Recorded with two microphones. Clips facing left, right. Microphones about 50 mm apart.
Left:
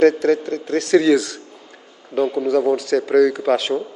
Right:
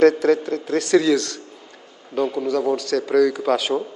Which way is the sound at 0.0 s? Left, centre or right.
Centre.